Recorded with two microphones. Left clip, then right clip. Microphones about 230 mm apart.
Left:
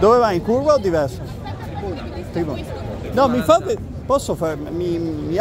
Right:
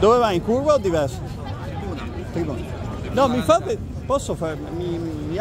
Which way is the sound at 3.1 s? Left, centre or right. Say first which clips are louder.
Left 3 dB; centre.